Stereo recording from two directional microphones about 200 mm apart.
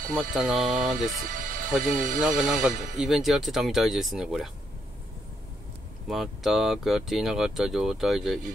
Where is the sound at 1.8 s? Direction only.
45° right (ahead or behind).